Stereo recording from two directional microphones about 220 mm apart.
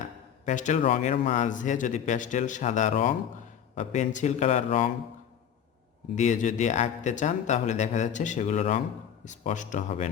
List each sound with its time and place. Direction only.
0.4 s speech: 35° left (ahead or behind)
6.1 s speech: 35° left (ahead or behind)